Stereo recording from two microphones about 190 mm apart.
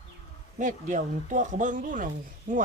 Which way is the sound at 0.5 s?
40° right (ahead or behind).